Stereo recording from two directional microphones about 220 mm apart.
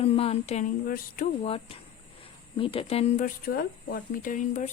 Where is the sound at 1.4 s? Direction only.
25° left (ahead or behind).